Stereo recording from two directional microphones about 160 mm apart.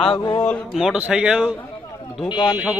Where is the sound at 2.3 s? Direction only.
25° left (ahead or behind).